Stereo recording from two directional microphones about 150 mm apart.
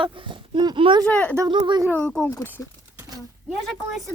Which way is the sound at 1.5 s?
30° right (ahead or behind).